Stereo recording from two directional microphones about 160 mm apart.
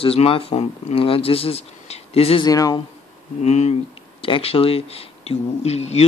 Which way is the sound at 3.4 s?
45° left (ahead or behind).